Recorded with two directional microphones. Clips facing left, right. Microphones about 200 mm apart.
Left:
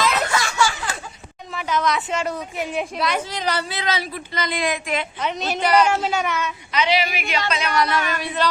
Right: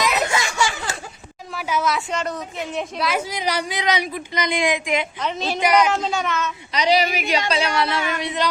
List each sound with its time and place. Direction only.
0.0 s a sound: 15° right (ahead or behind)
1.5 s speech: 5° right (ahead or behind)
3.0 s a woman's voice: 5° right (ahead or behind)
5.2 s speech: 5° left (ahead or behind)
5.5 s a woman's voice: 10° right (ahead or behind)
5.9 s speech: 5° left (ahead or behind)
6.7 s a woman's voice: 40° right (ahead or behind); by 8.4 s 20° right (ahead or behind)